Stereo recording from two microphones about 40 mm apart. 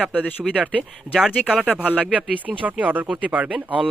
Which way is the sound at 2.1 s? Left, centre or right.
Right.